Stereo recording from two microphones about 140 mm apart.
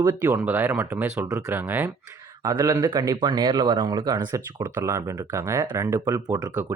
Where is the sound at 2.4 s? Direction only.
25° right (ahead or behind).